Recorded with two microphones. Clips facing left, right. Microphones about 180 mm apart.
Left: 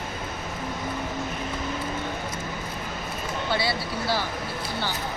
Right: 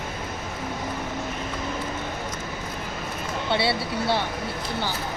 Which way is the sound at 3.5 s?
25° right (ahead or behind).